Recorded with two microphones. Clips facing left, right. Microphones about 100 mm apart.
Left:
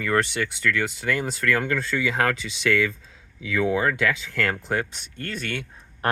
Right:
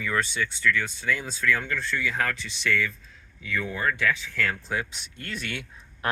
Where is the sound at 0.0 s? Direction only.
65° left (ahead or behind); by 4.5 s 80° left.